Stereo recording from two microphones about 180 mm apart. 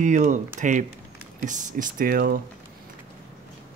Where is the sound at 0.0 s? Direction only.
45° right (ahead or behind).